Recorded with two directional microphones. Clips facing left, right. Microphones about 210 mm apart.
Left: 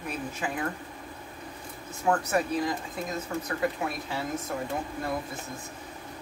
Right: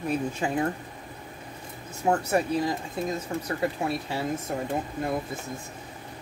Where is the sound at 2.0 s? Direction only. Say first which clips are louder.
Right 2 dB; 25° right (ahead or behind).